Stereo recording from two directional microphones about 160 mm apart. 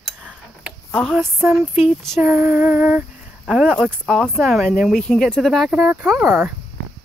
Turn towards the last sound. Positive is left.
turn(degrees=-15)  # may be behind; listen again after turning